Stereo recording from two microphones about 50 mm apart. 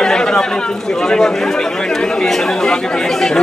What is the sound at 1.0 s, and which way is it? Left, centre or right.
Speech, centre.